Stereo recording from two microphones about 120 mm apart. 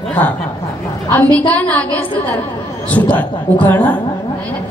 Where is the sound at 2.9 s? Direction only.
15° left (ahead or behind).